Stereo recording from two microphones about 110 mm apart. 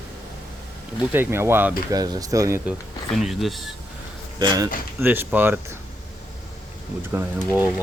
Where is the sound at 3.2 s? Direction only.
Centre (ahead or behind).